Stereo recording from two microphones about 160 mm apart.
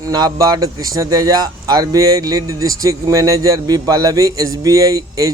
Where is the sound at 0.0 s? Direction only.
25° right (ahead or behind).